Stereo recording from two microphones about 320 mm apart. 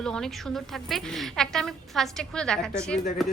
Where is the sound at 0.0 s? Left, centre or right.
Centre.